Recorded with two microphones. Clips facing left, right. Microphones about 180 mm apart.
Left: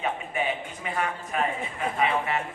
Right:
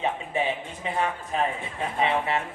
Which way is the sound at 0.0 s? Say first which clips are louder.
Right 2 dB; 30° right (ahead or behind).